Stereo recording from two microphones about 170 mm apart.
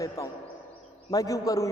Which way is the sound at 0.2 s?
20° left (ahead or behind).